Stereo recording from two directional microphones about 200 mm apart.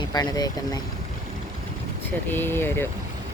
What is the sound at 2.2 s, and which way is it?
Speech, 10° left (ahead or behind).